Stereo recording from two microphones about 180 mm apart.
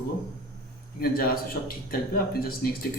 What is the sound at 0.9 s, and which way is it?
A man's voice, 55° left (ahead or behind).